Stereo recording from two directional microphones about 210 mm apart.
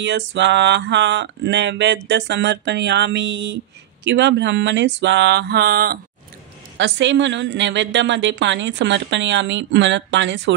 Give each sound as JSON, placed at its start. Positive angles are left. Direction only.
{"t": 0.3, "sound": "a woman's voice", "side_deg": -55}
{"t": 6.8, "sound": "a woman's voice", "side_deg": -60}